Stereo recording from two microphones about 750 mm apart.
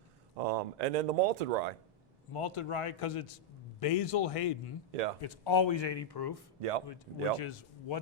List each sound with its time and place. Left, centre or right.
0.3 s speech: right
2.3 s a man's voice: left
6.6 s speech: right
6.8 s speech: left